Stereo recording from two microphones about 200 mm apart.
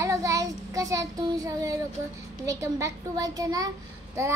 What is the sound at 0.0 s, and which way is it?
Child singing, 15° right (ahead or behind).